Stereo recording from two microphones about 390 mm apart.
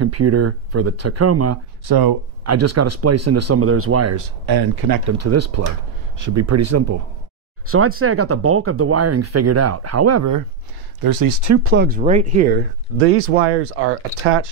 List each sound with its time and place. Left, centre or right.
0.0 s speech: right
1.9 s speech: right
2.4 s speech: right
4.5 s speech: right
5.0 s speech: right
7.6 s speech: right
11.0 s speech: right
11.6 s speech: right
12.9 s speech: right